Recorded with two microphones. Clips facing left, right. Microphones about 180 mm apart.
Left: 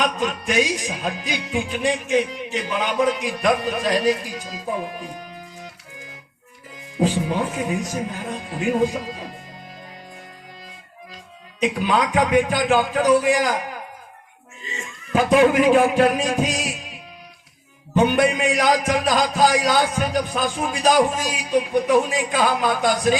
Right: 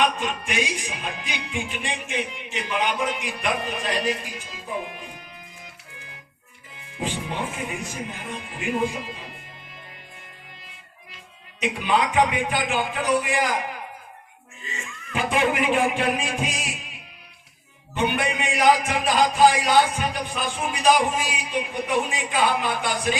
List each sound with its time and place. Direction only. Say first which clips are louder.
0.0 s music: left 1 dB; 40° left (ahead or behind)
6.9 s music: left 8 dB; 35° left (ahead or behind)
11.6 s music: left 3 dB; 40° left (ahead or behind)
15.1 s music: left 8 dB; 40° left (ahead or behind)
17.9 s music: left 7 dB; 40° left (ahead or behind)